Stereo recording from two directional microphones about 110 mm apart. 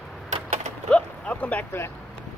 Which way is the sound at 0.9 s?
15° left (ahead or behind).